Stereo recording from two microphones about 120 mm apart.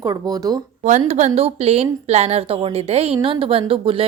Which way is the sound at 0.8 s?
80° right.